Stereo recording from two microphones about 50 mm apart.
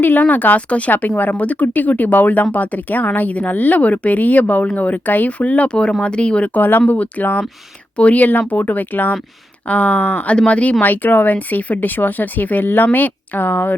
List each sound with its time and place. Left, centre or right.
0.0 s speech: left
6.5 s speech: left